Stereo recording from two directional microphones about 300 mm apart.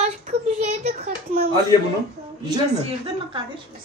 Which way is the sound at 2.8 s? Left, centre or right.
Centre.